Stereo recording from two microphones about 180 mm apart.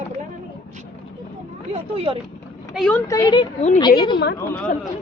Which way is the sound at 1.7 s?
30° right (ahead or behind).